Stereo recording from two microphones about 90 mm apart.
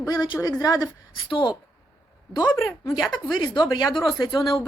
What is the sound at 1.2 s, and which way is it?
Speech, 70° left (ahead or behind).